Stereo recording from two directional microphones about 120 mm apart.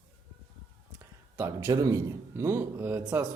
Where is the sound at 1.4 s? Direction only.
25° right (ahead or behind).